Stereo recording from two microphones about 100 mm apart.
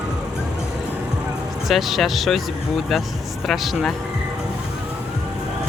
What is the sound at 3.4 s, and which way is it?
Speech, centre (ahead or behind).